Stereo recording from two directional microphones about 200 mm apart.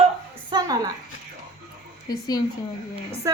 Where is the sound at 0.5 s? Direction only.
20° right (ahead or behind).